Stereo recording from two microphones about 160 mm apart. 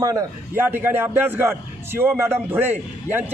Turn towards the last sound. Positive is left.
turn(degrees=-10)  # may be behind; listen again after turning